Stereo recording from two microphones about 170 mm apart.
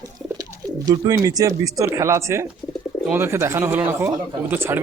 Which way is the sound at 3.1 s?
15° right (ahead or behind).